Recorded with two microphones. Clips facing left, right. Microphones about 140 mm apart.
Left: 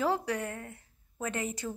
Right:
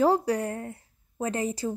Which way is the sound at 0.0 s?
40° right (ahead or behind).